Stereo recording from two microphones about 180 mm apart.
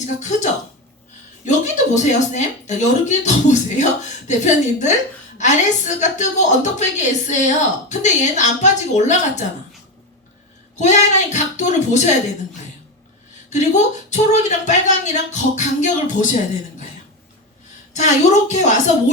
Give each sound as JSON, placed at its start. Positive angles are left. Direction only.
{"t": 0.0, "sound": "a woman's voice", "side_deg": 40}
{"t": 10.8, "sound": "a woman's voice", "side_deg": 40}
{"t": 13.5, "sound": "a woman's voice", "side_deg": 40}
{"t": 17.9, "sound": "a woman's voice", "side_deg": 40}